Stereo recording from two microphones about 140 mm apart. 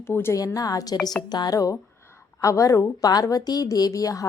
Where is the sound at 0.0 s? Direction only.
15° left (ahead or behind).